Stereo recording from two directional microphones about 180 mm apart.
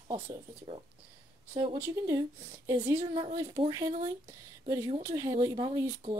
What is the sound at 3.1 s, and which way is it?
Speech, 25° right (ahead or behind).